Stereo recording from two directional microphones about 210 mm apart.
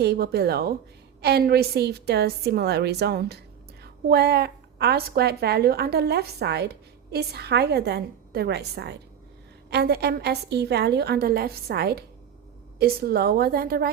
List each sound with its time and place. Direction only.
0.0 s a woman's voice: 50° right (ahead or behind)